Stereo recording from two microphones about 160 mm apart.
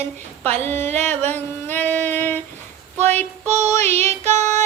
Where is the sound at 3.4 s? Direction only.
45° right (ahead or behind).